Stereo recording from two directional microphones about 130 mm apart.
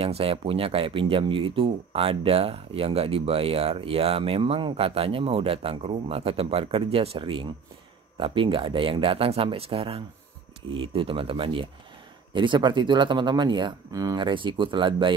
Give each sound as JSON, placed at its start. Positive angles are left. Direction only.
{"t": 0.0, "sound": "speech", "side_deg": -45}